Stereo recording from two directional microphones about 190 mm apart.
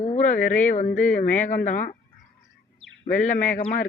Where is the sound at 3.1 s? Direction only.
40° left (ahead or behind).